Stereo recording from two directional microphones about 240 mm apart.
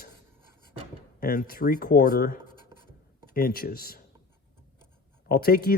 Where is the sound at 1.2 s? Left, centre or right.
Left.